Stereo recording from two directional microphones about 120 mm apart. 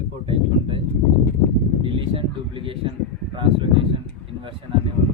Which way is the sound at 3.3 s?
45° right (ahead or behind).